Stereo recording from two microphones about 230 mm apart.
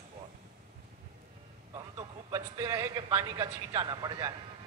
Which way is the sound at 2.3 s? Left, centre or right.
Centre.